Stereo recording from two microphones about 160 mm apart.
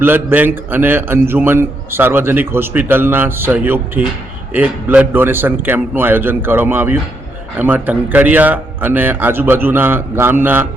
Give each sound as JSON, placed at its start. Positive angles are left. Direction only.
{"t": 0.0, "sound": "a man's voice", "side_deg": -15}